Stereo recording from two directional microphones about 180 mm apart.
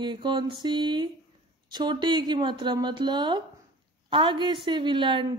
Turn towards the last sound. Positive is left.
turn(degrees=-25)  # may be behind; listen again after turning